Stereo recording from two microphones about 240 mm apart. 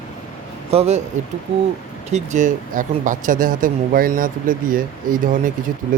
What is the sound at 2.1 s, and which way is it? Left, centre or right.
Speech, right.